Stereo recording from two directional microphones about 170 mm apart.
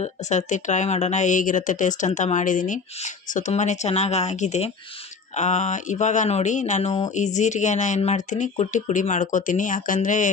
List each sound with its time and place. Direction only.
0.0 s speech: 45° left (ahead or behind)